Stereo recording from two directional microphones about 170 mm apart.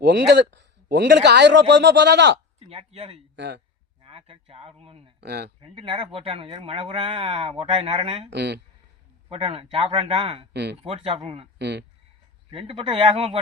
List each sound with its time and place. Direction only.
0.0 s a man's voice: 85° right
2.6 s speech: 35° right (ahead or behind)
3.3 s speech: 90° right
4.0 s speech: 35° right (ahead or behind)
5.2 s speech: 75° right (ahead or behind)
5.5 s speech: 30° right (ahead or behind)
8.3 s speech: 80° right
9.3 s speech: 35° right (ahead or behind)
10.5 s speech: 80° right
10.8 s speech: 35° right (ahead or behind)
11.6 s speech: 85° right
12.5 s speech: 35° right (ahead or behind)